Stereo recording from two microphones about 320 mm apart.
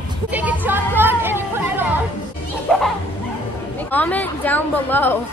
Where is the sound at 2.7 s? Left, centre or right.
Centre.